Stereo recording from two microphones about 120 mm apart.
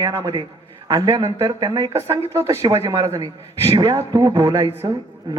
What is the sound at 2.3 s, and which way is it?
A man's voice, 25° right (ahead or behind).